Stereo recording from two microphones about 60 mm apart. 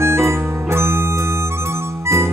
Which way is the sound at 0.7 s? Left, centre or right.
Right.